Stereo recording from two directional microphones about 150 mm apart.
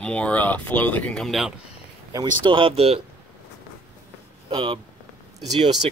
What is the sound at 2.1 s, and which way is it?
Speech, 30° right (ahead or behind).